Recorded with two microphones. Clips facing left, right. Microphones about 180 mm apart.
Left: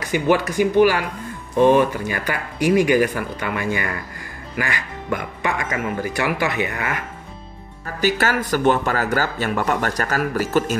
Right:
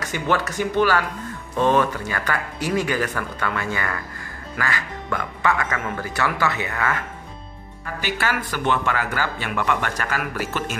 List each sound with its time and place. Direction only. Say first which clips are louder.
0.0 s speech: left 5 dB; 10° left (ahead or behind)
7.8 s speech: left 6 dB; 40° left (ahead or behind)